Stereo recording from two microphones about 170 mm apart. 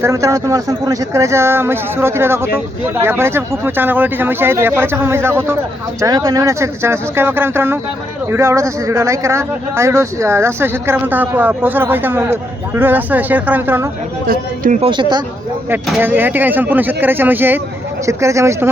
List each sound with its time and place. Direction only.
0.0 s speech: 15° right (ahead or behind)
14.3 s speech: 55° right (ahead or behind)
14.8 s speech: 30° right (ahead or behind)
16.0 s speech: 10° right (ahead or behind)